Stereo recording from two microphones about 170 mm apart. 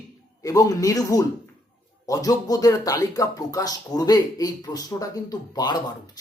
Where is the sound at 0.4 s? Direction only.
20° left (ahead or behind).